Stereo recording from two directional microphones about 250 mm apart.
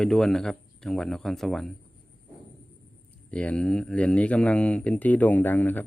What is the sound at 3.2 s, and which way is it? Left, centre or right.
Speech, centre.